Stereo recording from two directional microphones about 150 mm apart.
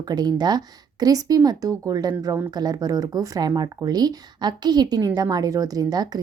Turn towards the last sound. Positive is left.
turn(degrees=-25)  # may be behind; listen again after turning